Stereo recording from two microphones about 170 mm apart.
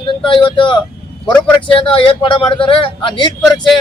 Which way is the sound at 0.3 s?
30° left (ahead or behind).